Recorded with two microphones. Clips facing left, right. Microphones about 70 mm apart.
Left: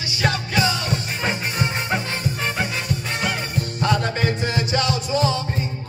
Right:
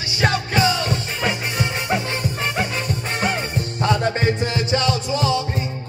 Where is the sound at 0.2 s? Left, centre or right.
Right.